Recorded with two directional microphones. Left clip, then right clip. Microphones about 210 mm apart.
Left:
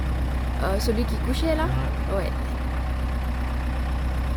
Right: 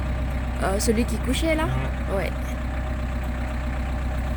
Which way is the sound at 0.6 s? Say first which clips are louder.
Right 2 dB; 15° right (ahead or behind).